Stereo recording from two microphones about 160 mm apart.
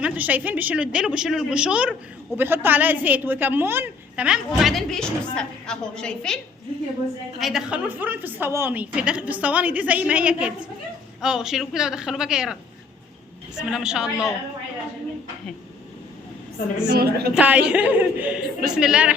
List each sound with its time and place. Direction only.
0.0 s a woman's voice: 10° right (ahead or behind)
13.6 s a woman's voice: 5° right (ahead or behind)
16.9 s a woman's voice: 85° right
17.3 s a woman's voice: 5° right (ahead or behind)